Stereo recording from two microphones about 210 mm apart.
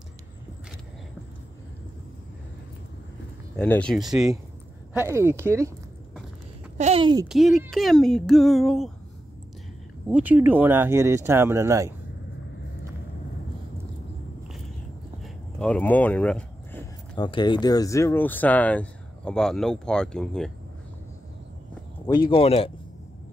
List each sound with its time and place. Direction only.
3.5 s speech: 5° left (ahead or behind)
4.9 s speech: 10° right (ahead or behind)
6.8 s a child's voice: 25° right (ahead or behind)
7.2 s speech: centre (ahead or behind)
10.1 s speech: 10° right (ahead or behind)
15.2 s a sound: 5° left (ahead or behind)
17.1 s speech: 20° left (ahead or behind); by 20.5 s 5° left (ahead or behind)
22.3 s speech: 25° left (ahead or behind)